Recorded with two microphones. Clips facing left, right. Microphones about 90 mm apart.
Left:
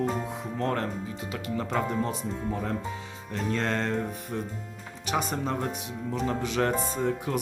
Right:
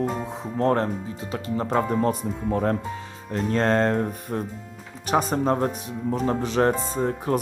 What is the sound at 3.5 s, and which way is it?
Music, 45° right (ahead or behind).